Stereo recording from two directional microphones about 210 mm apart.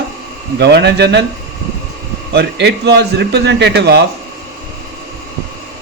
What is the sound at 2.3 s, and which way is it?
A man's voice, 55° right (ahead or behind).